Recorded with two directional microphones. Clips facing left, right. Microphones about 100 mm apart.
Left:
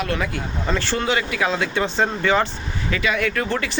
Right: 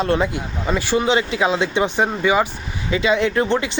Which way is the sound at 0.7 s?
15° right (ahead or behind).